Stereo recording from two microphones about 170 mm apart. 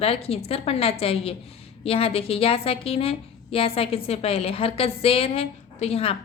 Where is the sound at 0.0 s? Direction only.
35° left (ahead or behind).